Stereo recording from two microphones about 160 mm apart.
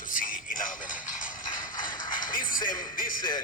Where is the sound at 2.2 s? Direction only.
25° left (ahead or behind).